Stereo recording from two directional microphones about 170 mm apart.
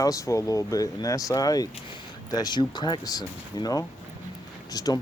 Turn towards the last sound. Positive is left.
turn(degrees=20)  # may be behind; listen again after turning